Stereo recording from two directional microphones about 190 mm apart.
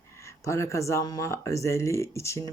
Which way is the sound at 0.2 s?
15° left (ahead or behind).